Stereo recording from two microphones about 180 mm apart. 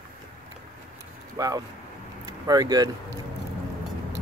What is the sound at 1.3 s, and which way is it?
Speech, 20° right (ahead or behind).